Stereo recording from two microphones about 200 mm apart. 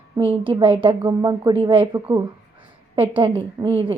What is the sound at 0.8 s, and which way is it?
Speech, 25° right (ahead or behind).